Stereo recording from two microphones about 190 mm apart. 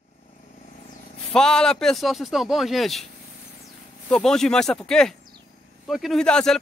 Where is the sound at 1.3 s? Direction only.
5° left (ahead or behind).